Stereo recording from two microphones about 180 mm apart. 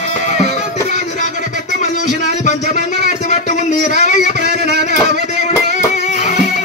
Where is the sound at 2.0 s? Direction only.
45° left (ahead or behind).